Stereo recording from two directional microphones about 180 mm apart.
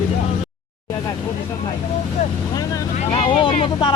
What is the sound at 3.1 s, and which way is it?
Vehicle, 30° left (ahead or behind).